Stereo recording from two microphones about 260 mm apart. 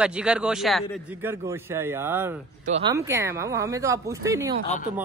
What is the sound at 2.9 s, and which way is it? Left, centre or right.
A man's voice, centre.